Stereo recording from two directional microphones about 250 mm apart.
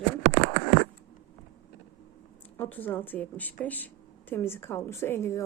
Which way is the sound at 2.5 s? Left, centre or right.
Centre.